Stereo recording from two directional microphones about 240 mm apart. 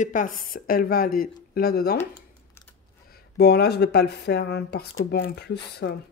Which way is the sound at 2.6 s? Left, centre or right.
Centre.